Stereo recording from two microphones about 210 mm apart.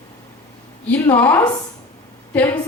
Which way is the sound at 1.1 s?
10° left (ahead or behind).